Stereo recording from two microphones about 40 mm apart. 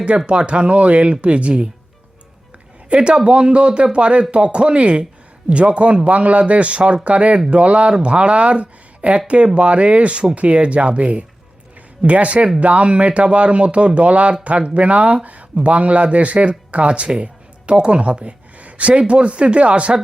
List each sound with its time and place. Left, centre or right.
0.3 s speech: right
2.9 s speech: right